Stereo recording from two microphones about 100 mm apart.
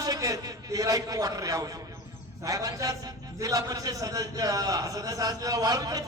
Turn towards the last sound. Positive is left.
turn(degrees=-40)  # may be behind; listen again after turning